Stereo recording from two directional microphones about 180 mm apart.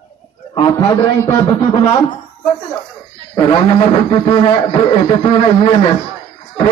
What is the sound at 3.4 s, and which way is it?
A man's voice, 25° left (ahead or behind).